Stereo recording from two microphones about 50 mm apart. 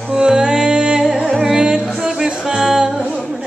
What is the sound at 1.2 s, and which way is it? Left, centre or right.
Music, centre.